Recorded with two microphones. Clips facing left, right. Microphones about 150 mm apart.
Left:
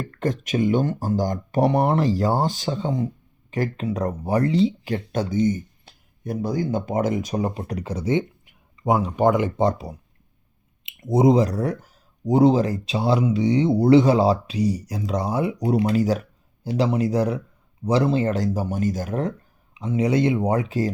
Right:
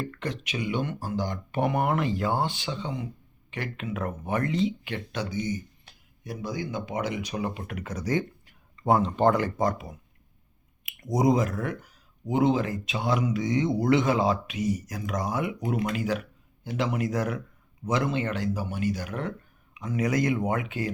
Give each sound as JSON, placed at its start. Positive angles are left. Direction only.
{"t": 0.0, "sound": "speech", "side_deg": 45}
{"t": 19.7, "sound": "speech", "side_deg": 30}